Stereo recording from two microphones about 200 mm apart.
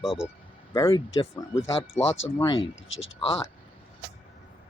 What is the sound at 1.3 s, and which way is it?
Speech, 15° left (ahead or behind).